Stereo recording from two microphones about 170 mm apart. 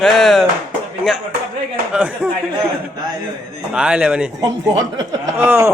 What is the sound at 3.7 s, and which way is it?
Speech, 5° right (ahead or behind).